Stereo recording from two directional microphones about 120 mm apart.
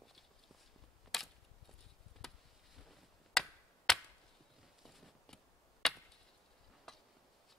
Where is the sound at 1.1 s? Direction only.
Centre (ahead or behind).